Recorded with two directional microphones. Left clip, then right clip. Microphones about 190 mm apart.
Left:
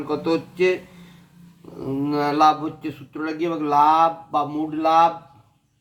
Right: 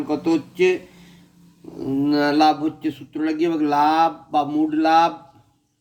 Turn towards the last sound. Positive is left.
turn(degrees=-20)  # may be behind; listen again after turning